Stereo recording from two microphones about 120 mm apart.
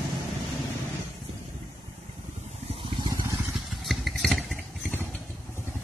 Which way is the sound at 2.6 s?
50° right (ahead or behind).